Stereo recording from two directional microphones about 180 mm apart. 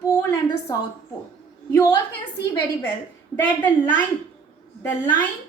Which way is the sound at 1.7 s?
15° left (ahead or behind).